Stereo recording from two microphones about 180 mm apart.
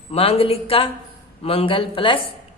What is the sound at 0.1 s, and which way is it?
A woman's voice, 35° left (ahead or behind).